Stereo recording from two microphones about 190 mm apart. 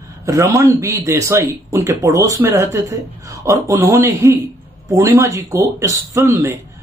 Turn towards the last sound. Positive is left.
turn(degrees=-15)  # may be behind; listen again after turning